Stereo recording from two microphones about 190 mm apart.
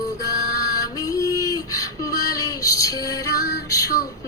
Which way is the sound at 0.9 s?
20° left (ahead or behind).